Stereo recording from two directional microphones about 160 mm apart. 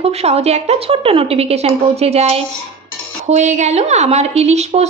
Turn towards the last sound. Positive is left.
turn(degrees=-45)  # may be behind; listen again after turning